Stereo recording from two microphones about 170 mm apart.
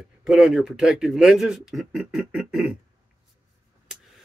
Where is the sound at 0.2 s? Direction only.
5° right (ahead or behind).